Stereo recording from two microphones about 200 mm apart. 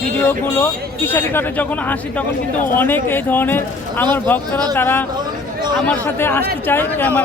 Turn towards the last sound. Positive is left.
turn(degrees=10)  # may be behind; listen again after turning